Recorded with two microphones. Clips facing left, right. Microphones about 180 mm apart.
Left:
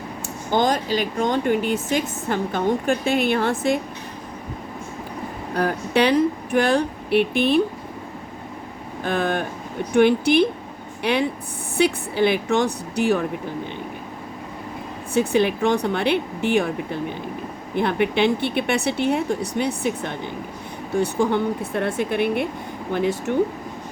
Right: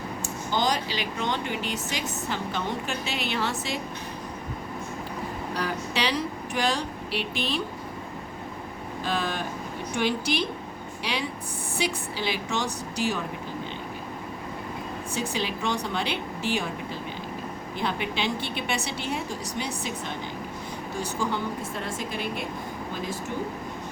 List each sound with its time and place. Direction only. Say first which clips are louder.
0.5 s speech: left 7 dB; 50° left (ahead or behind)
5.5 s a woman's voice: left 10 dB; 55° left (ahead or behind)
9.0 s a woman's voice: left 7 dB; 55° left (ahead or behind)
15.1 s a woman's voice: left 12 dB; 60° left (ahead or behind)